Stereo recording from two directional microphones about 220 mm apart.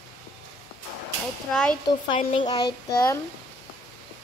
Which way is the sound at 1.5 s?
5° left (ahead or behind).